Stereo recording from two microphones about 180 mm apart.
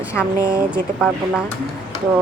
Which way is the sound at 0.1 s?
5° left (ahead or behind).